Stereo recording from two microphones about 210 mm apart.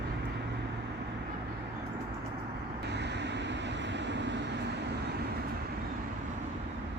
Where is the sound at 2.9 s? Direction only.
55° right (ahead or behind).